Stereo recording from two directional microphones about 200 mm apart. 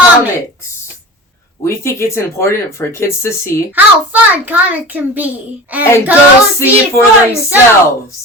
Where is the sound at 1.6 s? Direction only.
15° left (ahead or behind).